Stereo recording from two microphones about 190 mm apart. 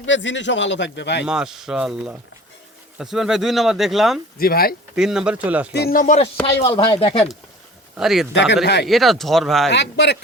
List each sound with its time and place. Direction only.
0.0 s a man's voice: 75° left (ahead or behind)
1.2 s speech: 5° right (ahead or behind)
4.4 s speech: 50° left (ahead or behind)
4.9 s speech: 5° right (ahead or behind)
5.7 s speech: 55° left (ahead or behind)
6.7 s speech: 30° left (ahead or behind)
7.9 s speech: centre (ahead or behind)
8.3 s a man's voice: 70° left (ahead or behind)
8.9 s speech: centre (ahead or behind)
9.6 s speech: 65° left (ahead or behind)